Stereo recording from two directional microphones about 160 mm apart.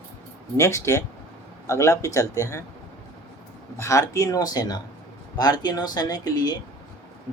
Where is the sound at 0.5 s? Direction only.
20° left (ahead or behind).